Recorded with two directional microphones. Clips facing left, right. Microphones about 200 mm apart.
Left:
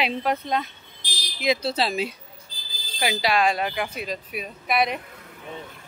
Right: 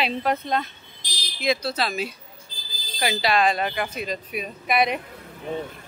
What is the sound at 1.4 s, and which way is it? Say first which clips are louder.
Speech: left 1 dB; 25° left (ahead or behind).